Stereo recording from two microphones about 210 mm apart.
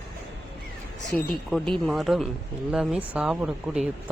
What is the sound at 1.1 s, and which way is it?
Speech, centre (ahead or behind).